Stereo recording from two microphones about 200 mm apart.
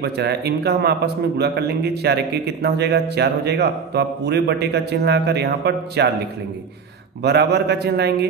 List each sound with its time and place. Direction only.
0.0 s a man's voice: 55° right (ahead or behind)
7.2 s a man's voice: 55° right (ahead or behind)